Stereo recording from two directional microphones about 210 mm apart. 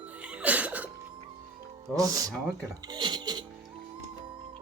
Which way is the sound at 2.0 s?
15° right (ahead or behind).